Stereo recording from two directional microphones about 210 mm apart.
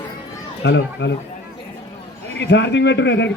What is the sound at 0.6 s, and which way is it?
Speech, 55° left (ahead or behind).